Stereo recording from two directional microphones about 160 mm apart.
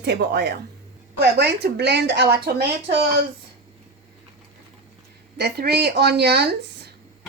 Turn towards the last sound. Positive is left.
turn(degrees=-90)